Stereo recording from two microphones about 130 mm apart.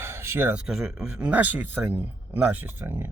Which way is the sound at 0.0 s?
20° right (ahead or behind).